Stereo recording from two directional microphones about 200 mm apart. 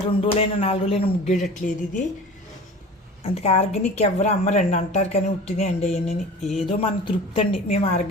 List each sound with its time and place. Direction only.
0.1 s a woman's voice: 30° left (ahead or behind)
3.2 s a woman's voice: 30° left (ahead or behind)
6.4 s speech: centre (ahead or behind)
6.7 s a woman's voice: 30° left (ahead or behind)